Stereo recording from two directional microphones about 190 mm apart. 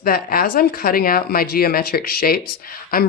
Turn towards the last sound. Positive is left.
turn(degrees=50)  # may be behind; listen again after turning